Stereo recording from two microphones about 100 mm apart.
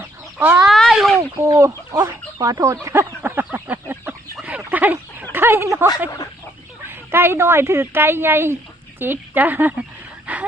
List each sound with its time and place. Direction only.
0.3 s speech: 15° right (ahead or behind)
0.7 s a sound: centre (ahead or behind)
1.4 s speech: 35° right (ahead or behind)
2.8 s fowl: 25° right (ahead or behind)
4.4 s a sound: 15° right (ahead or behind)
6.8 s speech: 20° right (ahead or behind)
10.3 s dog: 15° right (ahead or behind)